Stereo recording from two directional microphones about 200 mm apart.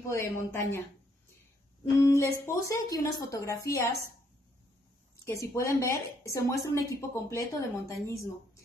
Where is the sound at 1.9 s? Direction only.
15° left (ahead or behind).